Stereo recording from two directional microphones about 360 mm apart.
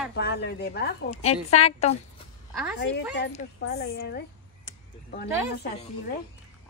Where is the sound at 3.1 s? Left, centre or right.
Left.